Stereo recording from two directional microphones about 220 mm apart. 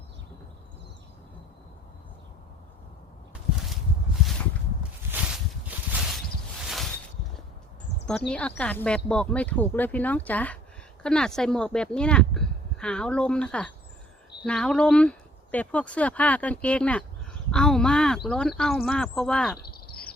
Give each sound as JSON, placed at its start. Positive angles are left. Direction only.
{"t": 5.1, "sound": "a sound", "side_deg": -5}
{"t": 8.3, "sound": "speech", "side_deg": 5}
{"t": 19.5, "sound": "cricket", "side_deg": 45}